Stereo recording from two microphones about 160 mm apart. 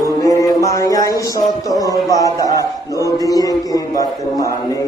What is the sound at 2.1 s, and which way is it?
A man's voice, 20° left (ahead or behind).